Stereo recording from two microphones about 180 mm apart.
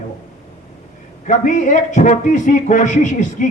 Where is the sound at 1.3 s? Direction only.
45° left (ahead or behind).